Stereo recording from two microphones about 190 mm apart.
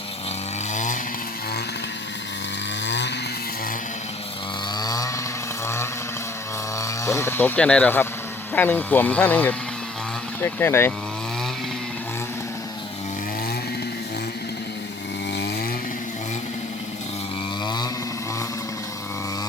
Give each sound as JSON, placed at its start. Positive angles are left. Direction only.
{"t": 0.7, "sound": "chainsaw", "side_deg": 40}
{"t": 2.8, "sound": "chainsaw", "side_deg": 70}
{"t": 4.8, "sound": "chainsaw", "side_deg": 20}
{"t": 5.6, "sound": "vehicle", "side_deg": 15}
{"t": 6.7, "sound": "speech", "side_deg": 15}